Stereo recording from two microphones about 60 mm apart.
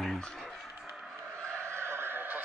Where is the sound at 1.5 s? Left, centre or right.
Right.